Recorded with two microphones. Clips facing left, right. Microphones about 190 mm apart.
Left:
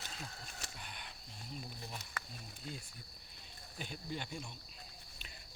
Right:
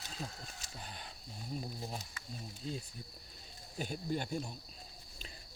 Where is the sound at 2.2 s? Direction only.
65° left (ahead or behind).